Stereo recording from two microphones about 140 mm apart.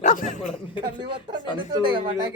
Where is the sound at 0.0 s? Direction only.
65° left (ahead or behind).